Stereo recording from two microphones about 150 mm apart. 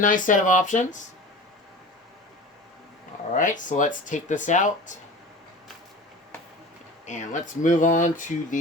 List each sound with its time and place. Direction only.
0.0 s speech: 65° left (ahead or behind)
3.3 s speech: 60° left (ahead or behind)
7.0 s speech: 55° left (ahead or behind)